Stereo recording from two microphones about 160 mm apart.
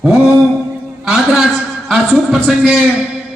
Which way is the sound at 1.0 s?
Centre (ahead or behind).